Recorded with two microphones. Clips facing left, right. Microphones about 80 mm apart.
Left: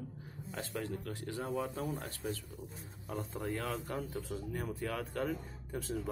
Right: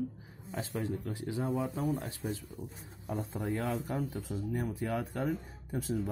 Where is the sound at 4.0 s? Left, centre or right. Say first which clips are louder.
Right 3 dB; centre.